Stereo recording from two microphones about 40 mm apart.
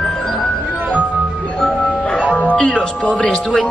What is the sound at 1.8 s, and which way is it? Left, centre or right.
Music, centre.